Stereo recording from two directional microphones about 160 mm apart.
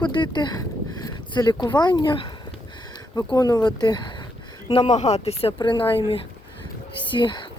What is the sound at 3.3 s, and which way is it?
Speech, 20° left (ahead or behind).